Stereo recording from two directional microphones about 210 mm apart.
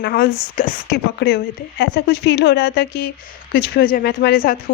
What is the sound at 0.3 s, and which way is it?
A woman's voice, 40° left (ahead or behind).